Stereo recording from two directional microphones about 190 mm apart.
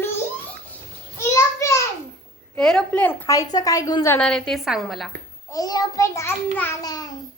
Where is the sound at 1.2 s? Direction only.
15° left (ahead or behind).